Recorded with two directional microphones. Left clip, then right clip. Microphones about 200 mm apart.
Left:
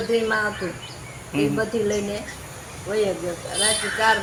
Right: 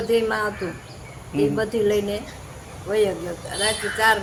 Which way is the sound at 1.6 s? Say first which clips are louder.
Right 2 dB; 15° right (ahead or behind).